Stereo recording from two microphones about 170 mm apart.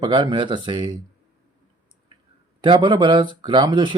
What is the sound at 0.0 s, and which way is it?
Speech, 25° right (ahead or behind).